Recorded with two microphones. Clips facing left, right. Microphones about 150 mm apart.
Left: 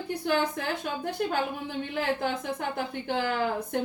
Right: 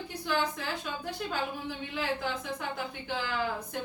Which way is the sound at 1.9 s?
55° left (ahead or behind).